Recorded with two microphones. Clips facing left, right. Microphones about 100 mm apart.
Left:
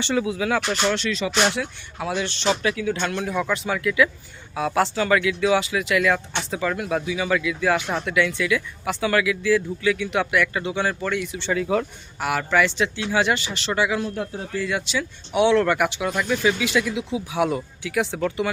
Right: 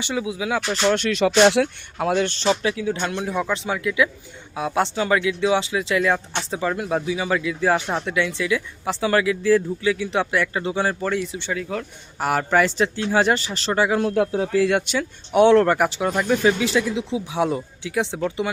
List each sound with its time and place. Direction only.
0.0 s speech: 10° right (ahead or behind)
0.9 s speech: 55° right (ahead or behind)
2.0 s speech: 50° right (ahead or behind)
2.5 s speech: 25° right (ahead or behind)
11.5 s speech: 5° left (ahead or behind)
12.2 s speech: 40° right (ahead or behind)
14.0 s speech: 90° right; by 18.4 s 20° right (ahead or behind)